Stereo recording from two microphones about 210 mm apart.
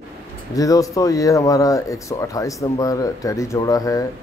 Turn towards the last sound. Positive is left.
turn(degrees=15)  # may be behind; listen again after turning